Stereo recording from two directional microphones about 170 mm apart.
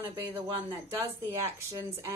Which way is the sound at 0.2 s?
15° right (ahead or behind).